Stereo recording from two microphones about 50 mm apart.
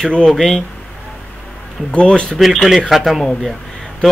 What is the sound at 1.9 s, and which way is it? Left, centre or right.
Speech, left.